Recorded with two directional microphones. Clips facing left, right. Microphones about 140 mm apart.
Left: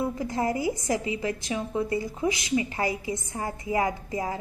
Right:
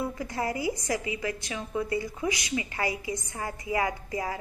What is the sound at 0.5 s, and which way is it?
Speech, 45° left (ahead or behind).